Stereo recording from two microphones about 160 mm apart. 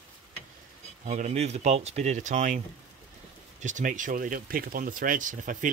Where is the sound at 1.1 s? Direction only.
45° right (ahead or behind).